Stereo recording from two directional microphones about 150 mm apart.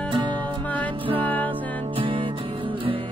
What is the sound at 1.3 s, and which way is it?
Music, 10° left (ahead or behind).